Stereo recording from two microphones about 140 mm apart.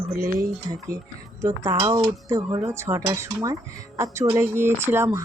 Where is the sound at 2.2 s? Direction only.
20° right (ahead or behind).